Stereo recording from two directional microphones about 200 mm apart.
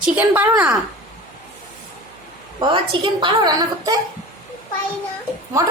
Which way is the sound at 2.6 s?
25° right (ahead or behind).